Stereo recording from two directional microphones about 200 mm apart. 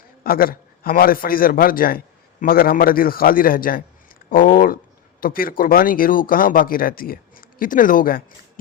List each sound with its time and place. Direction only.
0.3 s speech: 45° left (ahead or behind)